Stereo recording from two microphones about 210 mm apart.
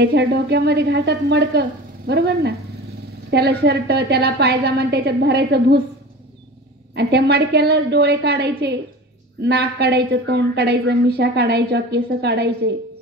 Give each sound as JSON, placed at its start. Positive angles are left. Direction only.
{"t": 0.0, "sound": "a woman's voice", "side_deg": -55}
{"t": 7.0, "sound": "a woman's voice", "side_deg": -50}